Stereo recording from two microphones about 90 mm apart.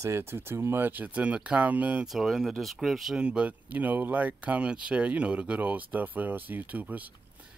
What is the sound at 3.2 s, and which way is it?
Speech, 10° right (ahead or behind).